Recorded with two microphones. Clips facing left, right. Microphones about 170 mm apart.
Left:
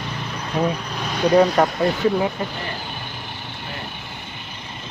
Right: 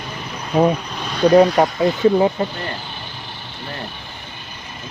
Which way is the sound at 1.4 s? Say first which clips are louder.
Right 2 dB; 15° right (ahead or behind).